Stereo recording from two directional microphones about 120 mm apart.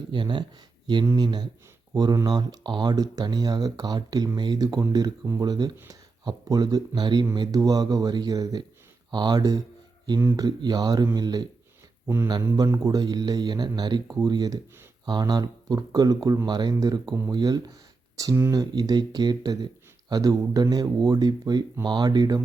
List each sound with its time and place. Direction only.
0.1 s speech: 40° right (ahead or behind)
12.0 s speech: 20° right (ahead or behind)
12.3 s speech: 30° right (ahead or behind)